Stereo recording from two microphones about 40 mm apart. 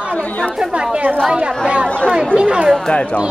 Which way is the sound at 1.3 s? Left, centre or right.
Right.